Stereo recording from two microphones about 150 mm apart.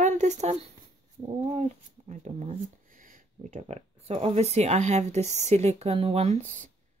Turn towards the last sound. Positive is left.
turn(degrees=-55)  # may be behind; listen again after turning